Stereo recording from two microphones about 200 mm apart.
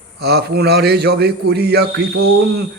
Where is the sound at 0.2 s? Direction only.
55° right (ahead or behind).